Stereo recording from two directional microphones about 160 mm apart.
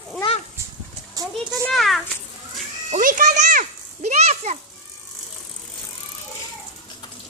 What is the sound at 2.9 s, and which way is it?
Children playing, 55° right (ahead or behind).